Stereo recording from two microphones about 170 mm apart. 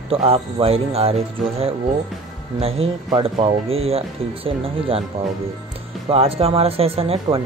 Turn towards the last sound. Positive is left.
turn(degrees=-35)  # may be behind; listen again after turning